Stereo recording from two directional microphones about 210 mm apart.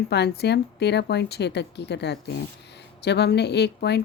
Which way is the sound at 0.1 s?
50° left (ahead or behind).